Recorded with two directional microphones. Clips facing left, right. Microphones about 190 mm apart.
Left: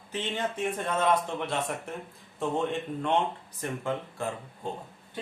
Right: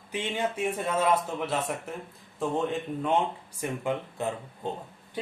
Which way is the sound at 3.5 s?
15° right (ahead or behind).